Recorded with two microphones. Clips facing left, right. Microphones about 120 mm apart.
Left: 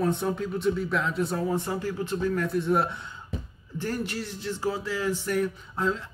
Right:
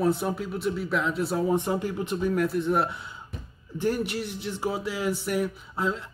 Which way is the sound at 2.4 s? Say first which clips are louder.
Even; centre (ahead or behind).